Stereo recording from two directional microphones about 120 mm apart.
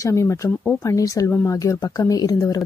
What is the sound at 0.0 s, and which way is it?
Speech, 25° left (ahead or behind).